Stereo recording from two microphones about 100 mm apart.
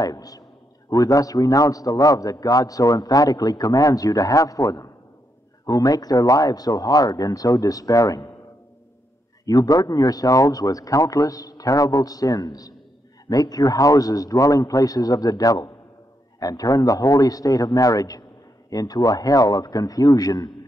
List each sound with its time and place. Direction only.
0.0 s a man's voice: 40° left (ahead or behind)
9.5 s a man's voice: 35° left (ahead or behind)